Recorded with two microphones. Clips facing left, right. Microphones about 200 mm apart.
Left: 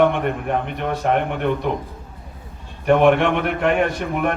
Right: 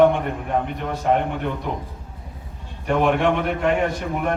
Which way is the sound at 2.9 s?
70° left (ahead or behind).